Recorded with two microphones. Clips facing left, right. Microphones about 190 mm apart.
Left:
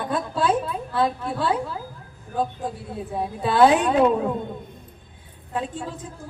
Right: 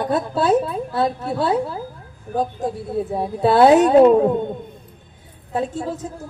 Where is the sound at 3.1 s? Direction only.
35° right (ahead or behind).